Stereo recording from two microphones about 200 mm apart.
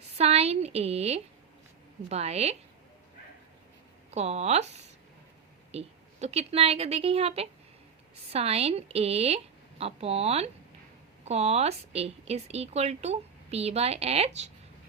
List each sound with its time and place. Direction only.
0.2 s a sound: 30° right (ahead or behind)
2.0 s speech: 30° right (ahead or behind)
4.1 s speech: 35° right (ahead or behind)